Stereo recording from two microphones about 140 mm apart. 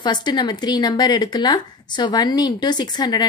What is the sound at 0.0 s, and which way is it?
A woman's voice, 30° left (ahead or behind).